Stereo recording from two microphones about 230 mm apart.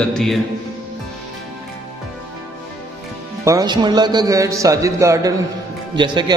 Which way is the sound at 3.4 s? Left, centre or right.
Centre.